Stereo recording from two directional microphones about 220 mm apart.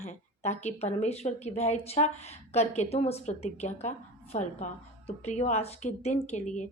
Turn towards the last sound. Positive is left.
turn(degrees=30)  # may be behind; listen again after turning